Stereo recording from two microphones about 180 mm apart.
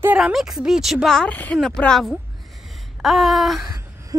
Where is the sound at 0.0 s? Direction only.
5° right (ahead or behind).